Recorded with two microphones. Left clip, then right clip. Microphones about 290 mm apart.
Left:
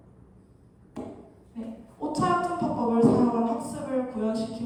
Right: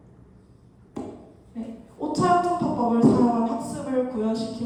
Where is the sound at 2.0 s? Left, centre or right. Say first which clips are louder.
Right 4 dB; left.